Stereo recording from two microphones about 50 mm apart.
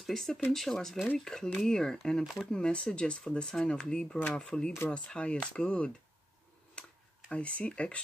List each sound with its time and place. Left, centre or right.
0.0 s speech: centre
2.2 s speech: centre
2.5 s speech: centre
6.8 s tick-tock: left
7.2 s speech: left